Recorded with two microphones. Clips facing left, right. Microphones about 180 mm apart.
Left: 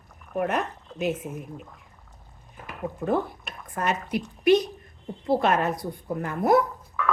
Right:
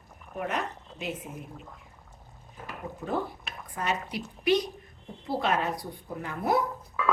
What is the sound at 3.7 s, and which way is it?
A woman's voice, 50° left (ahead or behind).